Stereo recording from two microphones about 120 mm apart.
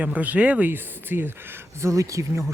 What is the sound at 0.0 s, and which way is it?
Speech, 15° right (ahead or behind).